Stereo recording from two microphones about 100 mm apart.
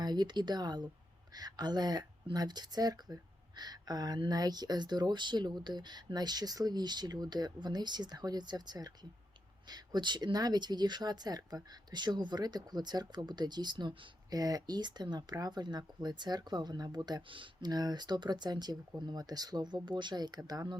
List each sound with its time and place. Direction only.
0.0 s speech: 45° right (ahead or behind)